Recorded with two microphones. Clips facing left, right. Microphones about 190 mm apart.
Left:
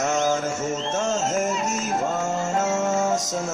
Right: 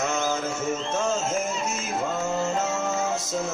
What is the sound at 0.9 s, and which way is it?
Speech, 45° left (ahead or behind).